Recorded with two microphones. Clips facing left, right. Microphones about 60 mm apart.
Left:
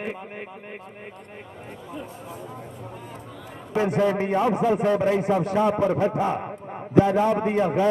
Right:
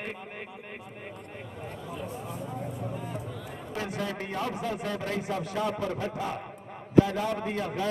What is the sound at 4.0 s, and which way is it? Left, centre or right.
A man's voice, left.